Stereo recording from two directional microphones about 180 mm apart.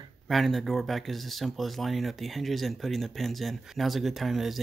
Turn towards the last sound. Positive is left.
turn(degrees=0)  # may be behind; listen again after turning